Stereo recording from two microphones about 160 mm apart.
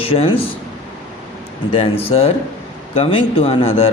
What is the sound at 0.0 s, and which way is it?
Speech, 35° left (ahead or behind).